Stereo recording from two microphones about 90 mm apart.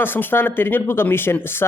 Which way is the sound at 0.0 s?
20° left (ahead or behind).